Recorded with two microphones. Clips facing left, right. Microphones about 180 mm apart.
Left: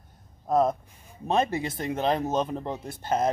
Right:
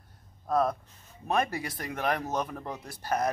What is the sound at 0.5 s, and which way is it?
Speech, 20° left (ahead or behind).